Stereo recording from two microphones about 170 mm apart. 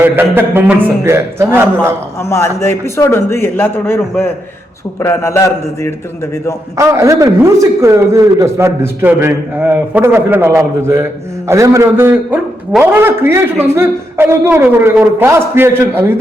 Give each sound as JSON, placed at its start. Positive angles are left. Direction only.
{"t": 0.0, "sound": "a man's voice", "side_deg": -10}
{"t": 2.3, "sound": "a man's voice", "side_deg": 15}
{"t": 6.7, "sound": "a man's voice", "side_deg": -20}